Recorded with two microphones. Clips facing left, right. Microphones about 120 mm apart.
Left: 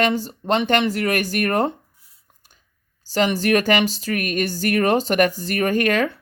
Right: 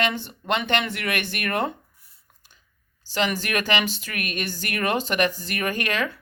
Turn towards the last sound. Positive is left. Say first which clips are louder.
# left 7 dB
turn(degrees=45)  # may be behind; listen again after turning